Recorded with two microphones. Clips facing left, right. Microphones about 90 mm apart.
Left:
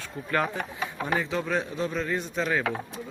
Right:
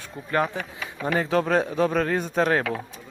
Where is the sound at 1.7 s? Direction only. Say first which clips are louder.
Right 6 dB; 60° right (ahead or behind).